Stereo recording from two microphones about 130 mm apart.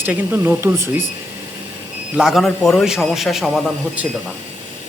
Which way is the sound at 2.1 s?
Centre (ahead or behind).